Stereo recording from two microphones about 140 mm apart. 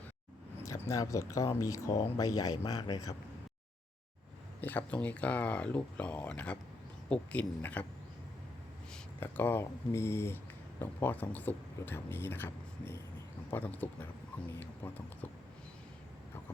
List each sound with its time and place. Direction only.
0.6 s speech: 20° left (ahead or behind)
4.6 s speech: 10° left (ahead or behind)
8.9 s speech: 15° left (ahead or behind)
13.5 s speech: 10° left (ahead or behind)